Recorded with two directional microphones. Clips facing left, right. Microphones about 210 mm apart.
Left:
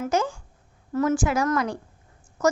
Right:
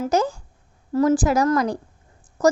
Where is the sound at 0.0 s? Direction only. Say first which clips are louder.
Right 4 dB; 35° right (ahead or behind).